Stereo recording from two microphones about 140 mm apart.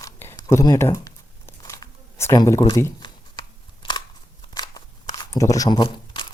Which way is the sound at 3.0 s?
35° left (ahead or behind).